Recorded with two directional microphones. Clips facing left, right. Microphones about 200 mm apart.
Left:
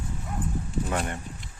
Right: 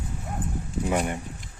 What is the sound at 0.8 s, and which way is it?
Speech, 10° right (ahead or behind).